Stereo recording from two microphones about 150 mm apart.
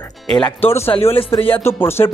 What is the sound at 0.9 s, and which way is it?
Speech, 40° left (ahead or behind).